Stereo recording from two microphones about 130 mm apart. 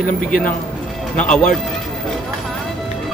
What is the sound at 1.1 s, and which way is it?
Speech, 10° left (ahead or behind).